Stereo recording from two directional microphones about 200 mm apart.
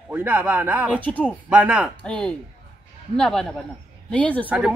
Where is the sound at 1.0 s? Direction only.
5° left (ahead or behind).